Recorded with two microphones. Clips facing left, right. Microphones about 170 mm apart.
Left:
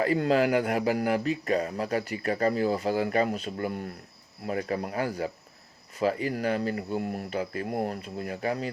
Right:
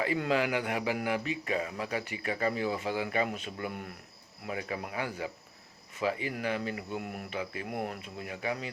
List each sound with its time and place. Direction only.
0.0 s speech: 40° left (ahead or behind)